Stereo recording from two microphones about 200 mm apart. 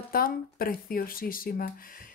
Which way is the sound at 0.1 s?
45° left (ahead or behind).